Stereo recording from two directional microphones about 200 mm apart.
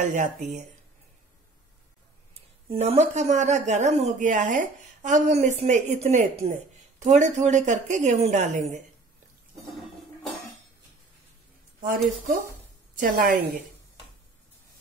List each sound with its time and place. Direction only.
0.0 s speech: 40° right (ahead or behind)
2.7 s speech: 30° right (ahead or behind)
11.8 s speech: 45° right (ahead or behind)